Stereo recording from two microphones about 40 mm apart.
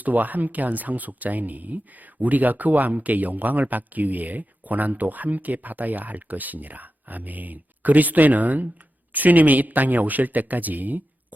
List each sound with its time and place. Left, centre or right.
0.0 s speech: right